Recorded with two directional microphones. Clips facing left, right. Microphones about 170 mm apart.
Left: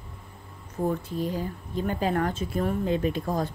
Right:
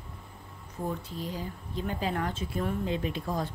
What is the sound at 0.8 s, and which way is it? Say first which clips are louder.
Speech: left 7 dB; 50° left (ahead or behind).